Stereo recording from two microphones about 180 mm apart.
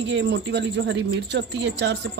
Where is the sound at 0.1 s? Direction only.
80° right.